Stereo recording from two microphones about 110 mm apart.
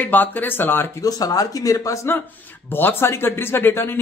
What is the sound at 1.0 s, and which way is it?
Speech, 35° left (ahead or behind).